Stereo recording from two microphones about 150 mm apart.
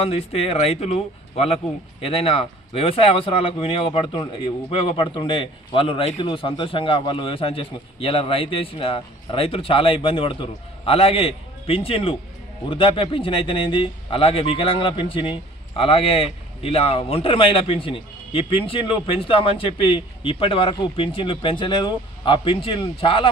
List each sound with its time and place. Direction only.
0.0 s speech: 40° left (ahead or behind)
2.0 s speech: 40° left (ahead or behind)